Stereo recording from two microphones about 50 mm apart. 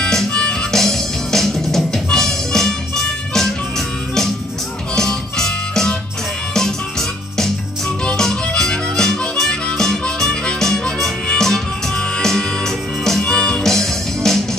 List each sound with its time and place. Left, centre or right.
0.3 s music: left
4.9 s music: centre
8.2 s harmonica: centre
10.0 s music: centre
13.7 s music: centre